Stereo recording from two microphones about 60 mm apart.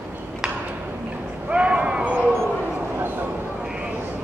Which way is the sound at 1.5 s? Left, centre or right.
Centre.